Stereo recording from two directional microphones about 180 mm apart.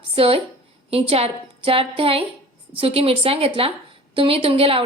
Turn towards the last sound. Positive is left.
turn(degrees=-30)  # may be behind; listen again after turning